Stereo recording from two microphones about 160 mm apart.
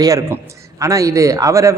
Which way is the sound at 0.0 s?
20° right (ahead or behind).